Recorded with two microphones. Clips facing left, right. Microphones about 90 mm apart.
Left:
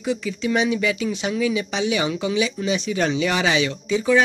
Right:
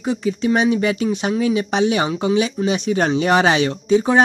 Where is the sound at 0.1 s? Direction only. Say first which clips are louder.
Right 4 dB; 40° right (ahead or behind).